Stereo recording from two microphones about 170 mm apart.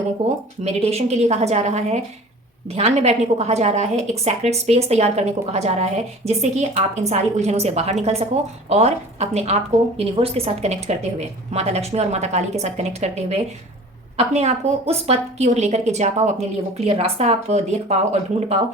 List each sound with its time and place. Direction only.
0.6 s a woman's voice: 40° right (ahead or behind)